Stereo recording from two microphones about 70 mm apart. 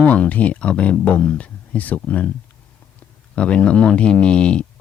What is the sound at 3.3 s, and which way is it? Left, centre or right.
Speech, centre.